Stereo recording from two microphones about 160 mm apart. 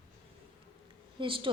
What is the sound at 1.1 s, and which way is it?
Speech, 35° right (ahead or behind).